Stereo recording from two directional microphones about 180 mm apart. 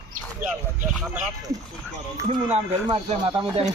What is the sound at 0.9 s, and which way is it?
Speech, 5° right (ahead or behind).